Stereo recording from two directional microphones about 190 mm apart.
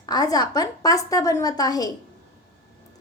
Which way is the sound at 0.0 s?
20° left (ahead or behind).